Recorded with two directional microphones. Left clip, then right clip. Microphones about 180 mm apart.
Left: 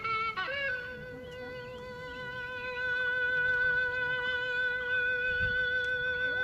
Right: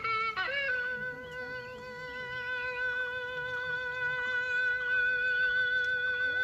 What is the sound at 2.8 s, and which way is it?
Music, 35° right (ahead or behind).